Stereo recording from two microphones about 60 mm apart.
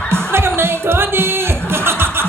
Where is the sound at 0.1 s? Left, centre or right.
Right.